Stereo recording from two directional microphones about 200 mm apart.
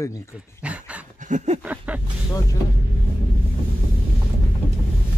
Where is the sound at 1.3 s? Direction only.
35° right (ahead or behind).